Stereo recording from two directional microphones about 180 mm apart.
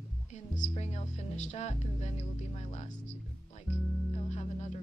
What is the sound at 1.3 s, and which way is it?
Speech, 40° left (ahead or behind).